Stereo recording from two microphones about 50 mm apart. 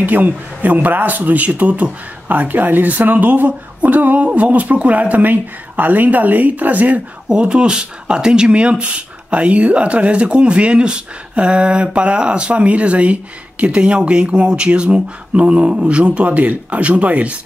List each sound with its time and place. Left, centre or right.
0.0 s speech: right
7.2 s speech: centre